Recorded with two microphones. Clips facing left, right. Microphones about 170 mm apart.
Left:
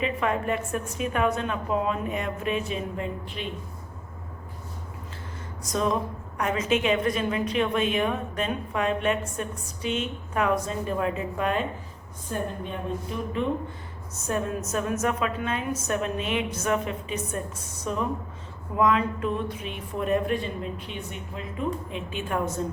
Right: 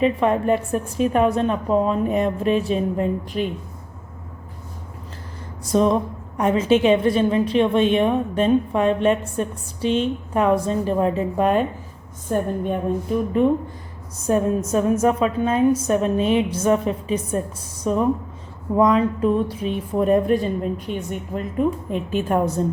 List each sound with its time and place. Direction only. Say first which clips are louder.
0.0 s a woman's voice: right 8 dB; 35° right (ahead or behind)
5.6 s a woman's voice: right 8 dB; 30° right (ahead or behind)
12.3 s a woman's voice: right 9 dB; 50° right (ahead or behind)
14.3 s a woman's voice: right 9 dB; 30° right (ahead or behind)